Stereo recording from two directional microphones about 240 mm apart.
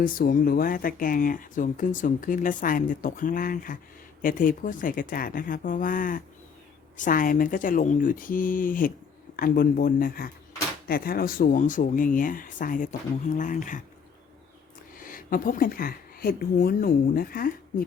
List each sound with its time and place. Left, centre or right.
0.0 s speech: left
14.9 s speech: left